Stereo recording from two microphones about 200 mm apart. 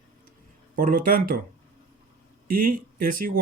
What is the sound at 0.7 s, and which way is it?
Speech, 45° right (ahead or behind).